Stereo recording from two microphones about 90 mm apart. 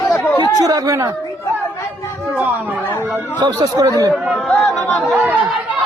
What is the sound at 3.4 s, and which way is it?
Speech, 45° right (ahead or behind).